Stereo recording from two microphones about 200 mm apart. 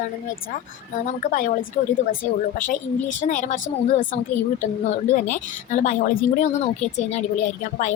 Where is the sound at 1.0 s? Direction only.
40° left (ahead or behind).